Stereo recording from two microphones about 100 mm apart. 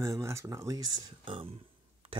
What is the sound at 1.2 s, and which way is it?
Speech, 60° right (ahead or behind).